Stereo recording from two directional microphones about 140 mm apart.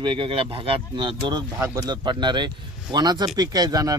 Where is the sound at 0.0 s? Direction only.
40° right (ahead or behind).